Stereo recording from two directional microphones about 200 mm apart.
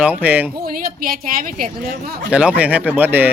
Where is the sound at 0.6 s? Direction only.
45° right (ahead or behind).